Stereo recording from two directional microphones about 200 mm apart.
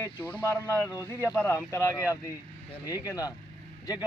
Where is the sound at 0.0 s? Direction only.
10° left (ahead or behind).